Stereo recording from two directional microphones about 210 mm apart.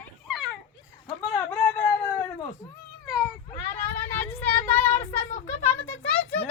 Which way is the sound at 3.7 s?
10° left (ahead or behind).